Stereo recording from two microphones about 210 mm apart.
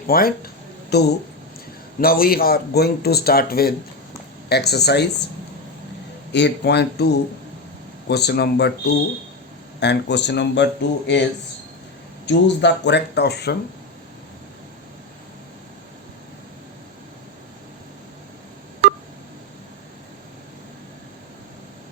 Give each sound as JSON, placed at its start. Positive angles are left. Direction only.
{"t": 0.1, "sound": "speech", "side_deg": 45}
{"t": 6.3, "sound": "speech", "side_deg": 55}
{"t": 9.8, "sound": "speech", "side_deg": 55}
{"t": 12.2, "sound": "speech", "side_deg": 55}